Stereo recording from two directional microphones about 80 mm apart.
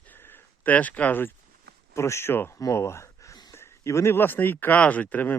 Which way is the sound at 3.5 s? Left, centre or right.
Left.